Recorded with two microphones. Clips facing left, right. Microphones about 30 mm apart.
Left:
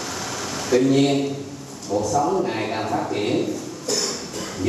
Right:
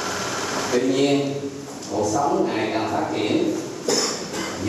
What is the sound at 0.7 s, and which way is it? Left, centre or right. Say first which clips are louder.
Speech: left 4 dB; centre.